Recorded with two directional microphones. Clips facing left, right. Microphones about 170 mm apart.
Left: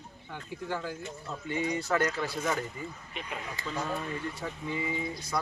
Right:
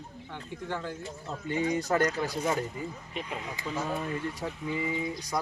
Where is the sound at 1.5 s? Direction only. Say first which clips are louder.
Right 3 dB; 40° right (ahead or behind).